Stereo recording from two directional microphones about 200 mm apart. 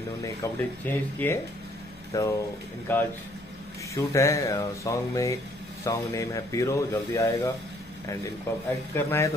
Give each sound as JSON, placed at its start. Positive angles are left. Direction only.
{"t": 0.2, "sound": "speech", "side_deg": 10}
{"t": 8.9, "sound": "speech", "side_deg": 10}